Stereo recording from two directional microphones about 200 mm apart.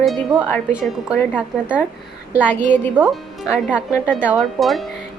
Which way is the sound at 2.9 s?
5° right (ahead or behind).